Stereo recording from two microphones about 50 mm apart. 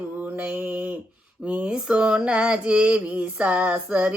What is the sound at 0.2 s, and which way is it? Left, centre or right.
Mantra, right.